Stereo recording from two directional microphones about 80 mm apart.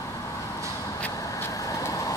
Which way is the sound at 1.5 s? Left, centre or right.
Left.